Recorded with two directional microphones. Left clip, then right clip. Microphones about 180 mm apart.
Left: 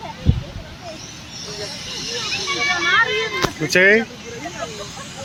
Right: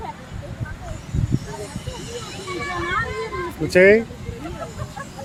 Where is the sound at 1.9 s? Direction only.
40° right (ahead or behind).